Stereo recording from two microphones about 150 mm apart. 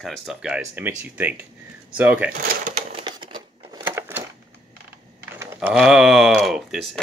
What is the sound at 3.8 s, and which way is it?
Crushing, 15° right (ahead or behind).